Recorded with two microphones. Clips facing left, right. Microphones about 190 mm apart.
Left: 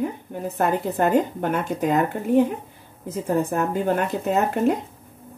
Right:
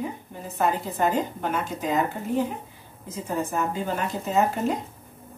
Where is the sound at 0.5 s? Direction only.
55° left (ahead or behind).